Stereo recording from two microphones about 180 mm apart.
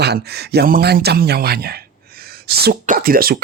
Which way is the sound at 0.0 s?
65° right (ahead or behind).